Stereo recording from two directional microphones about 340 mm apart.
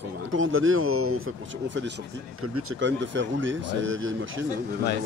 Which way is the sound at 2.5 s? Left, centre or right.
Right.